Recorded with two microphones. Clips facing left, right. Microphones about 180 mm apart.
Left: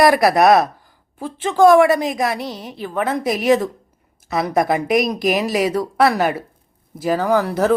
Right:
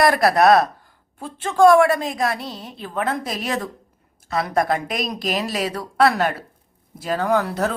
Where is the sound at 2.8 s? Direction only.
Centre (ahead or behind).